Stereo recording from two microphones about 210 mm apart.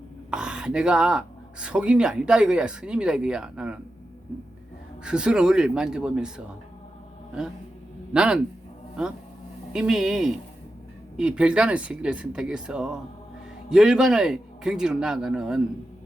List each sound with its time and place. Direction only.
0.3 s speech: 5° right (ahead or behind)
5.0 s speech: 5° right (ahead or behind)